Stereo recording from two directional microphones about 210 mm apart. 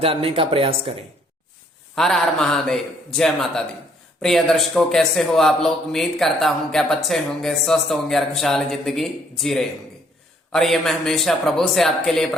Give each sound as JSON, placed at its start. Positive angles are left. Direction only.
{"t": 0.0, "sound": "speech", "side_deg": -25}
{"t": 2.0, "sound": "a man's voice", "side_deg": 0}